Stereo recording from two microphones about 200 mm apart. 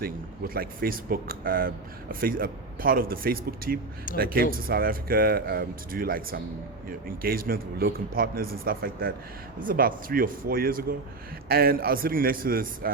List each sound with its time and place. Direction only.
0.0 s speech: 50° right (ahead or behind)